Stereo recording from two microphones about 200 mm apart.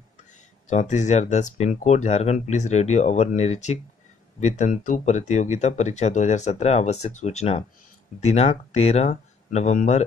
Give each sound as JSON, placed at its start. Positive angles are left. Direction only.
{"t": 0.3, "sound": "speech", "side_deg": 35}